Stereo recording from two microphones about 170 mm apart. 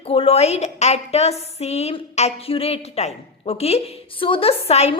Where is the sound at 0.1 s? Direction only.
35° left (ahead or behind).